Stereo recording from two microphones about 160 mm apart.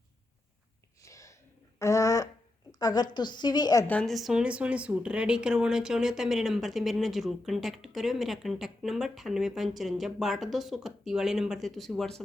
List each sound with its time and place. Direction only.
1.0 s a sound: 20° left (ahead or behind)
2.7 s a woman's voice: 25° left (ahead or behind)
3.8 s speech: 5° left (ahead or behind)